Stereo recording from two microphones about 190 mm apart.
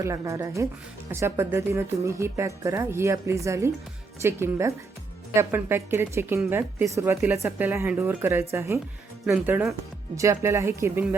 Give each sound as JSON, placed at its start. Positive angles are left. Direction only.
{"t": 0.0, "sound": "speech", "side_deg": -15}